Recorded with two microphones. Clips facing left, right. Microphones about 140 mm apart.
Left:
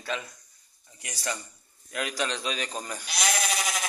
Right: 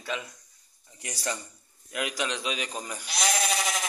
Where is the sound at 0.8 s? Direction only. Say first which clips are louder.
Right 1 dB; 25° right (ahead or behind).